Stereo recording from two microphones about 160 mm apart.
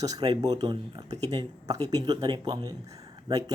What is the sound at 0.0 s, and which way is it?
Speech, 25° right (ahead or behind).